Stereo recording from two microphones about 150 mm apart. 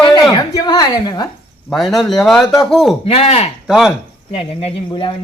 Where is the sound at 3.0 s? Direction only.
40° left (ahead or behind).